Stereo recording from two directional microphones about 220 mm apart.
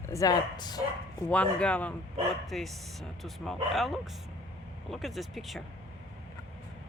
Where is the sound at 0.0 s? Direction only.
15° left (ahead or behind).